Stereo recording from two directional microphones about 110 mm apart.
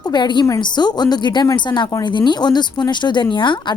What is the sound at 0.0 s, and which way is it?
A woman's voice, 40° left (ahead or behind).